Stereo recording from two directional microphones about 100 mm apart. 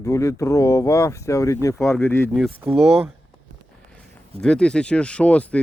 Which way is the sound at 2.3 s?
Centre (ahead or behind).